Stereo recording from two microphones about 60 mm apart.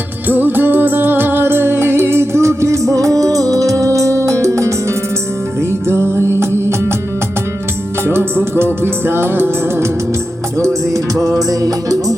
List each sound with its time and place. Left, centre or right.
0.3 s music: right
5.9 s music: right
8.0 s music: right
10.6 s music: right